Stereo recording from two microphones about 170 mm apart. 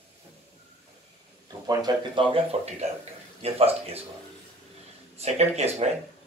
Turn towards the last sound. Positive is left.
turn(degrees=-40)  # may be behind; listen again after turning